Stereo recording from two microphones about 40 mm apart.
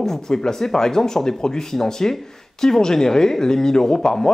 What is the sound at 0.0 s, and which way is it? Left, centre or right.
Speech, centre.